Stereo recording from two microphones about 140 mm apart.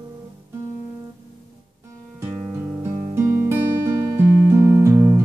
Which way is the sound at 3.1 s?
15° right (ahead or behind).